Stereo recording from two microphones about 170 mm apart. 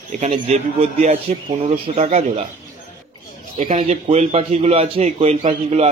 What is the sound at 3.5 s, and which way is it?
Speech, 50° right (ahead or behind).